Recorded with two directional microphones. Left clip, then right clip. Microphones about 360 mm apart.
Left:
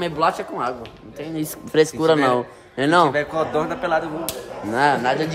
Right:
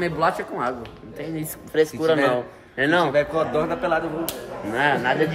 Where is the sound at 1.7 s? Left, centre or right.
Left.